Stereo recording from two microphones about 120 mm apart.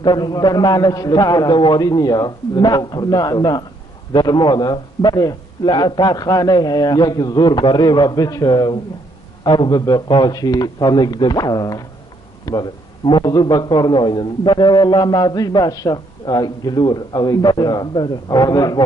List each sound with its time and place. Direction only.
0.0 s a man's voice: 35° left (ahead or behind)